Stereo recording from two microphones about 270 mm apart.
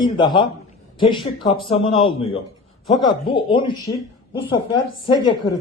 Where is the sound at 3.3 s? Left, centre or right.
Centre.